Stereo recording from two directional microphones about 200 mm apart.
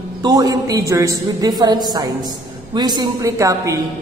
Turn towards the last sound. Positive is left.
turn(degrees=-15)  # may be behind; listen again after turning